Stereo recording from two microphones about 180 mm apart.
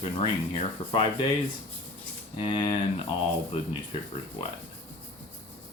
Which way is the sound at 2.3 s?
25° left (ahead or behind).